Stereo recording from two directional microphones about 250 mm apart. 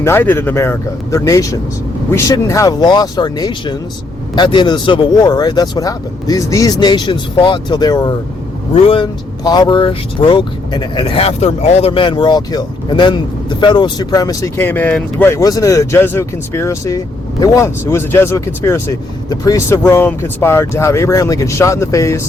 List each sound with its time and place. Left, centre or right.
0.0 s speech: centre